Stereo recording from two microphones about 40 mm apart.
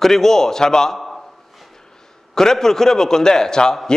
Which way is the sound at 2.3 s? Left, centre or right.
Centre.